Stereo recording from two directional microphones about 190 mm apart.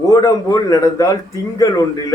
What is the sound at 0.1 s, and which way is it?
A man's voice, 15° left (ahead or behind).